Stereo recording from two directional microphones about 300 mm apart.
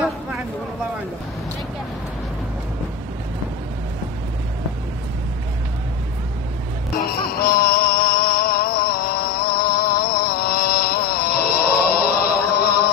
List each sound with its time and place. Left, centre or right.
7.0 s music: left